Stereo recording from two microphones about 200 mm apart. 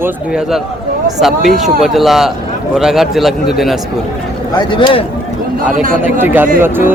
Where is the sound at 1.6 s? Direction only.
Centre (ahead or behind).